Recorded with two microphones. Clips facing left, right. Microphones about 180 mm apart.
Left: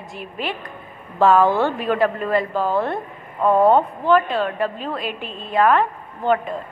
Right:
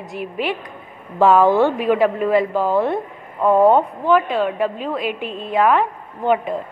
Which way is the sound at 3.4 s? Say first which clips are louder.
Right 2 dB; centre (ahead or behind).